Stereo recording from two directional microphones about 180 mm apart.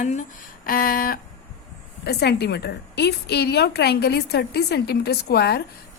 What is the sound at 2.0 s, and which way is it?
A woman's voice, 65° left (ahead or behind).